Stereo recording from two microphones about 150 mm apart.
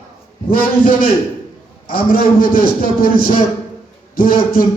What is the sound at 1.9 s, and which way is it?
Music, 75° left (ahead or behind).